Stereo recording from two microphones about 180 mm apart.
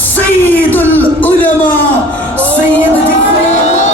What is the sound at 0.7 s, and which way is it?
Speech, 10° left (ahead or behind).